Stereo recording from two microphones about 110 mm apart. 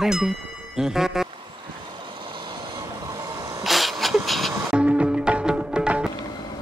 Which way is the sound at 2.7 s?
35° right (ahead or behind).